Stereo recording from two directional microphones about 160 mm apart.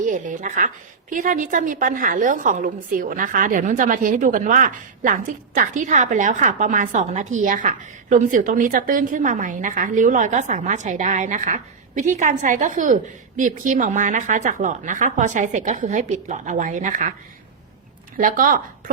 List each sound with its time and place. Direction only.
0.0 s a woman's voice: 55° right (ahead or behind)
18.2 s speech: 55° right (ahead or behind)